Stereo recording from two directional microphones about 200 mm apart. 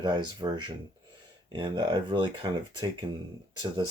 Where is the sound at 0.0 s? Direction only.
20° right (ahead or behind).